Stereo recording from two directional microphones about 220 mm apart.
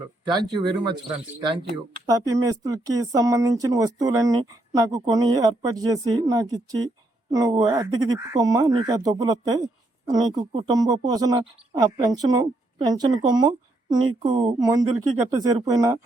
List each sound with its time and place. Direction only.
0.3 s speech: 20° right (ahead or behind)
2.0 s speech: 15° right (ahead or behind)